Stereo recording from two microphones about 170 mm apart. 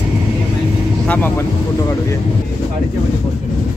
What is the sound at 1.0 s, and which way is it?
Speech, 10° left (ahead or behind).